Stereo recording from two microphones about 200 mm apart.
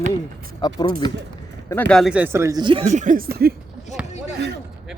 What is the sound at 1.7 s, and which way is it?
Speech, 10° left (ahead or behind).